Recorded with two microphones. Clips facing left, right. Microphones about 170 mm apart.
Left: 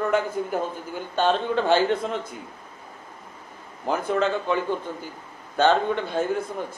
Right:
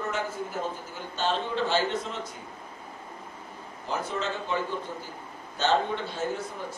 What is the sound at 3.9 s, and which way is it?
Speech, 55° left (ahead or behind).